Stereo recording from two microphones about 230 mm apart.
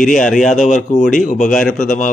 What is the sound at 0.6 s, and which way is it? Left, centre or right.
Speech, left.